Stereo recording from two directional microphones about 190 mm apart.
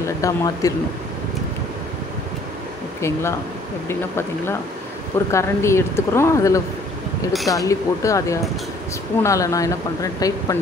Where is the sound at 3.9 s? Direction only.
15° left (ahead or behind).